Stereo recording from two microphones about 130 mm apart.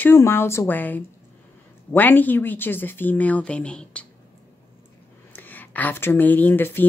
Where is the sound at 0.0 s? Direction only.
20° left (ahead or behind).